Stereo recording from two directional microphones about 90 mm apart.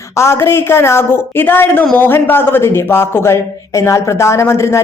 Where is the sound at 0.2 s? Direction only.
30° left (ahead or behind).